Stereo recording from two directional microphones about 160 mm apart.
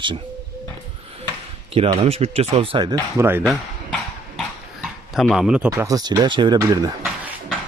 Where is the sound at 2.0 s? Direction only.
40° right (ahead or behind).